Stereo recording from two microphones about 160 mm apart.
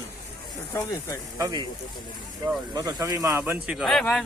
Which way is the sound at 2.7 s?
25° right (ahead or behind).